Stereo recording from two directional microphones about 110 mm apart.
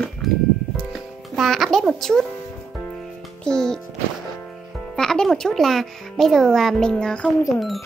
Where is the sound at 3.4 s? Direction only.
5° left (ahead or behind).